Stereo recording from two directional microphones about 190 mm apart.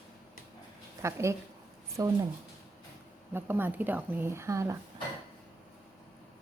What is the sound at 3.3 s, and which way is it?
A woman's voice, 10° right (ahead or behind).